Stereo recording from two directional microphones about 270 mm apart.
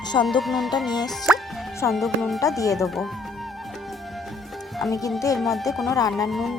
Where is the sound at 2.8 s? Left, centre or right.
Centre.